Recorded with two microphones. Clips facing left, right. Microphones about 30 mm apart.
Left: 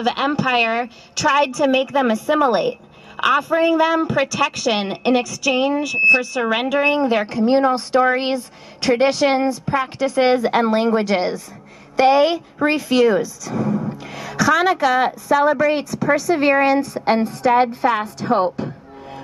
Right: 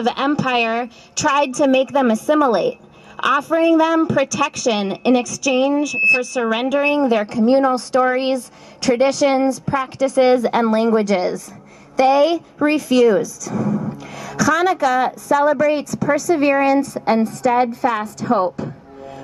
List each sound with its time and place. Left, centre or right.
0.0 s a woman's voice: centre; by 18.7 s left